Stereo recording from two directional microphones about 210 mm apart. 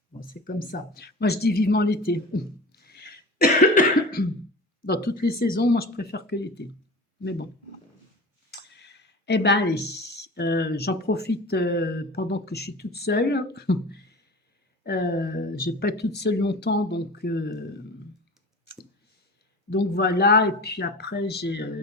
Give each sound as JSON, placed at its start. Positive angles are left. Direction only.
{"t": 0.2, "sound": "speech", "side_deg": 40}
{"t": 8.4, "sound": "speech", "side_deg": 50}
{"t": 19.7, "sound": "speech", "side_deg": 50}